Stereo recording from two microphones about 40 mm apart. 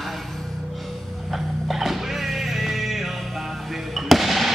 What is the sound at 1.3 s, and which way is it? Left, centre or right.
Music, centre.